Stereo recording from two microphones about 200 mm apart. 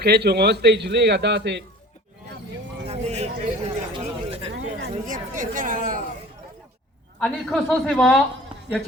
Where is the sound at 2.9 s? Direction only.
35° right (ahead or behind).